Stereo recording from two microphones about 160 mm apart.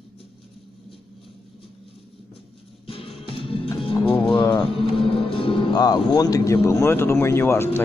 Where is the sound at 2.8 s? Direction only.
35° left (ahead or behind).